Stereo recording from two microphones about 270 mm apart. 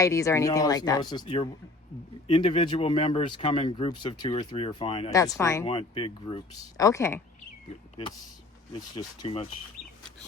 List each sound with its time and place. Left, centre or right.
0.0 s speech: centre
9.0 s speech: left